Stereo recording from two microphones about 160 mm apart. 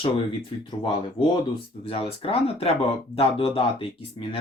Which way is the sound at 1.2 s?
30° left (ahead or behind).